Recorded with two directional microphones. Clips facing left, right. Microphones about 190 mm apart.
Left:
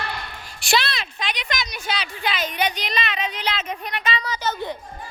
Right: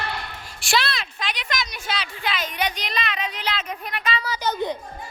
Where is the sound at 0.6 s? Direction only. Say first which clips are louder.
Left 1 dB; centre (ahead or behind); by 4.8 s 15° right (ahead or behind).